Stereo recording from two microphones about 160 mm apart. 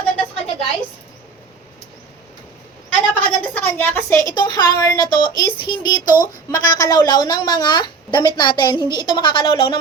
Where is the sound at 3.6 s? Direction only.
10° left (ahead or behind).